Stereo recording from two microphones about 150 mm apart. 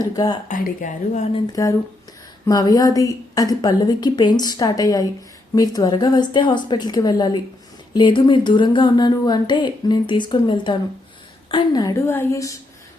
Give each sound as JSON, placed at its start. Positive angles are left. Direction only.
{"t": 0.0, "sound": "a woman's voice", "side_deg": 25}
{"t": 0.4, "sound": "speech", "side_deg": 60}
{"t": 1.6, "sound": "a woman's voice", "side_deg": 20}